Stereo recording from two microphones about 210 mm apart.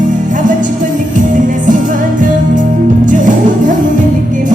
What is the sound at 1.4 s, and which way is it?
Music, 40° right (ahead or behind).